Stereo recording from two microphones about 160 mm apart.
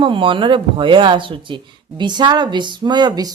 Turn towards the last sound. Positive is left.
turn(degrees=-25)  # may be behind; listen again after turning